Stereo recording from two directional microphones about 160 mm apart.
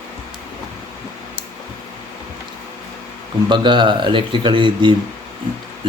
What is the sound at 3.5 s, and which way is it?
A man's voice, 30° right (ahead or behind).